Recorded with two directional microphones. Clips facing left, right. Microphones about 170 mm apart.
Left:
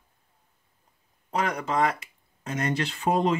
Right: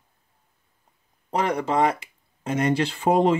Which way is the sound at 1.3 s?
30° right (ahead or behind).